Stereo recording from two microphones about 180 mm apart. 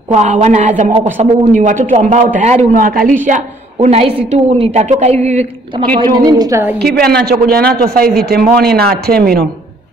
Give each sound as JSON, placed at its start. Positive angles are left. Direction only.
{"t": 0.1, "sound": "a woman's voice", "side_deg": -40}
{"t": 3.8, "sound": "a woman's voice", "side_deg": -35}
{"t": 6.1, "sound": "a woman's voice", "side_deg": -20}
{"t": 6.8, "sound": "speech", "side_deg": -60}